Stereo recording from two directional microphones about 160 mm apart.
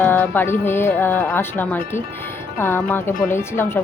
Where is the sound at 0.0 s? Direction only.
10° left (ahead or behind).